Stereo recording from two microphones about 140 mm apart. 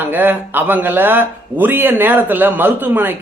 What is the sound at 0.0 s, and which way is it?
Speech, 15° right (ahead or behind).